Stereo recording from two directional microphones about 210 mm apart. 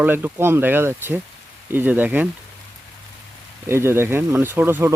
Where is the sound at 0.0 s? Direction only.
10° right (ahead or behind).